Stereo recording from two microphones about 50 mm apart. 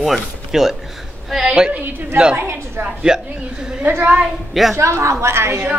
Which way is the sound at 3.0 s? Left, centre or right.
Centre.